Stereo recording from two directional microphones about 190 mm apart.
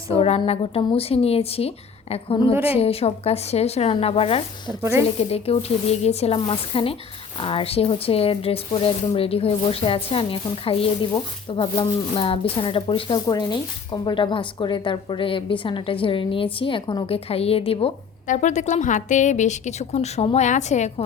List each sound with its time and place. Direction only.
0.2 s a woman's voice: 30° left (ahead or behind)
4.7 s speech: 15° right (ahead or behind)
5.3 s a woman's voice: 30° left (ahead or behind)